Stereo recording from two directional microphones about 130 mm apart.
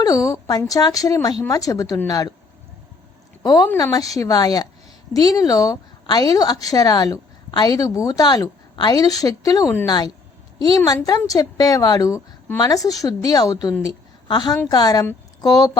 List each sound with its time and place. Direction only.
0.0 s a woman's voice: 25° left (ahead or behind)
3.4 s a woman's voice: 30° left (ahead or behind)
13.8 s a sound: 30° left (ahead or behind)
14.7 s a woman's voice: 30° left (ahead or behind)